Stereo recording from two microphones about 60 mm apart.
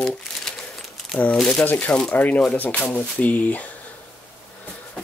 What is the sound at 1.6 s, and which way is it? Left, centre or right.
Speech, left.